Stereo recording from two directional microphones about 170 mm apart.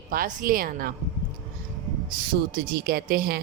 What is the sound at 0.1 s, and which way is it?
Speech, 55° right (ahead or behind).